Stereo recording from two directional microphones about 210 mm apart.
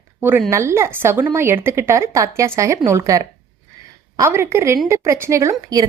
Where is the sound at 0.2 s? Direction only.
10° right (ahead or behind).